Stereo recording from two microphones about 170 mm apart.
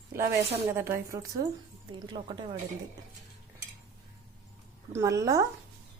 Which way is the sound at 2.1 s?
25° right (ahead or behind).